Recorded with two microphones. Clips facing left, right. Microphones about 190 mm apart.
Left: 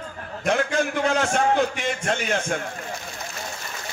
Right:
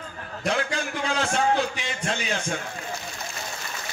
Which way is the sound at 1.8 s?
60° left (ahead or behind).